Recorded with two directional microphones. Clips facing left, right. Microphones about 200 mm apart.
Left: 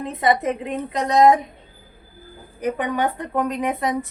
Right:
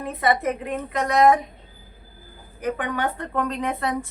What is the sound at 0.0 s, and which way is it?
A woman's voice, 20° left (ahead or behind).